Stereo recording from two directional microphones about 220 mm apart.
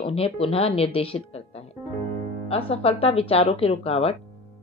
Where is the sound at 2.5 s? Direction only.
25° left (ahead or behind).